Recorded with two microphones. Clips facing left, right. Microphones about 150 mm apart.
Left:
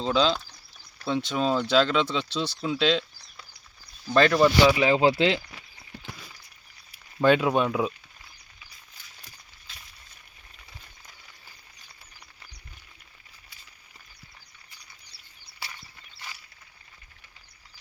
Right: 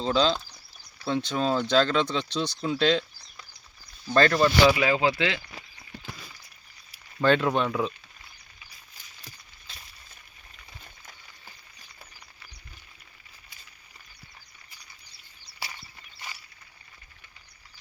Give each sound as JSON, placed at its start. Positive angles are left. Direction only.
{"t": 0.0, "sound": "speech", "side_deg": 5}
{"t": 4.8, "sound": "speech", "side_deg": 25}
{"t": 7.2, "sound": "speech", "side_deg": 10}